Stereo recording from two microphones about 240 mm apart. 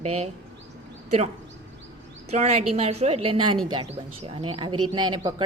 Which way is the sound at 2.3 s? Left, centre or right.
Right.